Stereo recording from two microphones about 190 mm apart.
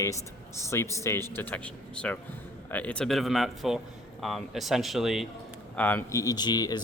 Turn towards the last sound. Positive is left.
turn(degrees=20)  # may be behind; listen again after turning